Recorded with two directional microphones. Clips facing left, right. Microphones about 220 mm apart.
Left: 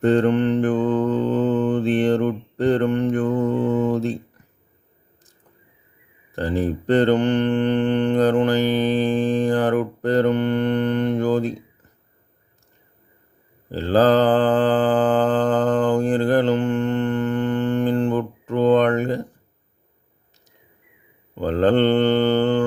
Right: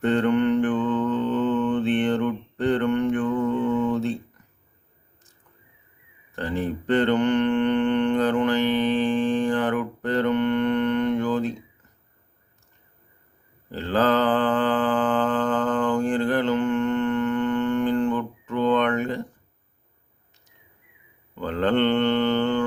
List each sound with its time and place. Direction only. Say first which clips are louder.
0.0 s mantra: left 3 dB; 35° left (ahead or behind)
6.3 s mantra: left 5 dB; 35° left (ahead or behind)
13.7 s mantra: left 5 dB; 35° left (ahead or behind)
21.3 s mantra: left 5 dB; 35° left (ahead or behind)